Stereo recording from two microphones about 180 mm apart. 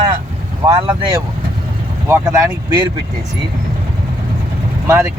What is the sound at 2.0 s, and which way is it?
Speech, 15° right (ahead or behind).